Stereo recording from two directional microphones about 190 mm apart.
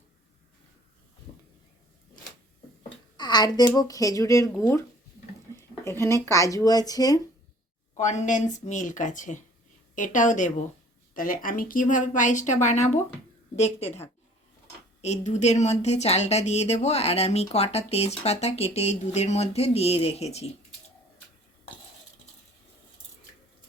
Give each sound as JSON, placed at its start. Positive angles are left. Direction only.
{"t": 3.2, "sound": "a sound", "side_deg": 20}
{"t": 3.7, "sound": "speech", "side_deg": 20}
{"t": 7.9, "sound": "a woman's voice", "side_deg": 40}